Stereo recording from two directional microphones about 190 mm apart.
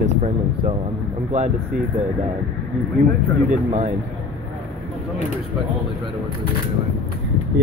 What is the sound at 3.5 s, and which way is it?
Speech, 35° right (ahead or behind).